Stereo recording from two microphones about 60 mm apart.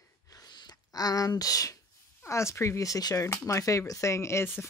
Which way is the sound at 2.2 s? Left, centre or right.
Left.